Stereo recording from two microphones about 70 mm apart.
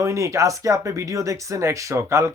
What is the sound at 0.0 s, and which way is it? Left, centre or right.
Speech, right.